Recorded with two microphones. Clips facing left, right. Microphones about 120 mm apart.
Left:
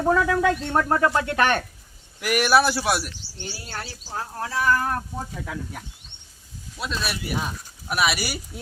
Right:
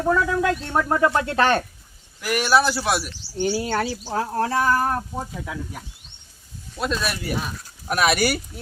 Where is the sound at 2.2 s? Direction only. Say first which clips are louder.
Even; 10° left (ahead or behind).